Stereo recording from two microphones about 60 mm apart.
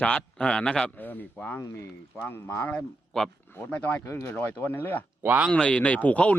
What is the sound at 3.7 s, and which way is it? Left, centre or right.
Speech, left.